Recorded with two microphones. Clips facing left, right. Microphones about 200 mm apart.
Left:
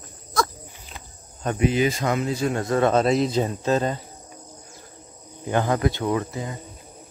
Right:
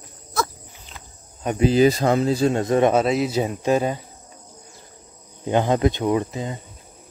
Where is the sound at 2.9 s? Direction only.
5° right (ahead or behind).